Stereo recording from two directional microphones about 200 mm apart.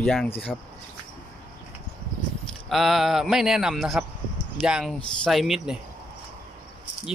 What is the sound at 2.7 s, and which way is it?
Speech, centre (ahead or behind).